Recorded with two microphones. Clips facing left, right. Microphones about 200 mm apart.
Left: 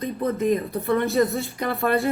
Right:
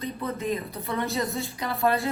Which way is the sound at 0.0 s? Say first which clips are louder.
Left 7 dB; 50° left (ahead or behind).